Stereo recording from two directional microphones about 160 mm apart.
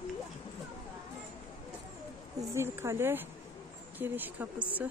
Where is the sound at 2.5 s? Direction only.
15° right (ahead or behind).